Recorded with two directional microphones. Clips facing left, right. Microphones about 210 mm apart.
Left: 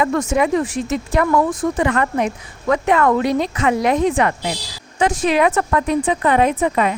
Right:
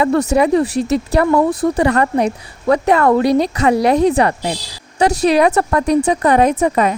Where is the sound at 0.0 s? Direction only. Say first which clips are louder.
Right 4 dB; 35° right (ahead or behind).